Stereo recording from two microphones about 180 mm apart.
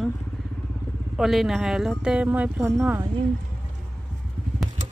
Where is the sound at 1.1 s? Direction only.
Centre (ahead or behind).